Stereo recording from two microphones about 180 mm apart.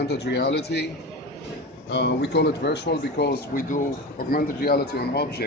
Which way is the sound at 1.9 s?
70° left (ahead or behind).